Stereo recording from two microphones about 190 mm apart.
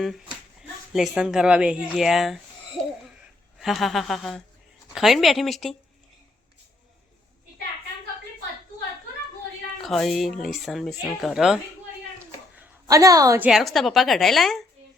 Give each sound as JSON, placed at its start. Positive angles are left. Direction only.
{"t": 0.0, "sound": "speech", "side_deg": 0}
{"t": 3.6, "sound": "speech", "side_deg": 0}
{"t": 9.8, "sound": "speech", "side_deg": 0}
{"t": 12.5, "sound": "a woman's voice", "side_deg": -15}
{"t": 13.5, "sound": "speech", "side_deg": 0}